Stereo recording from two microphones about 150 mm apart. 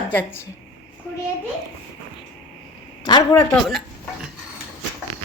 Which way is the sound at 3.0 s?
25° left (ahead or behind).